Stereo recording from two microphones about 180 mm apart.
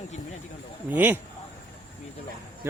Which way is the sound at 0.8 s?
10° right (ahead or behind).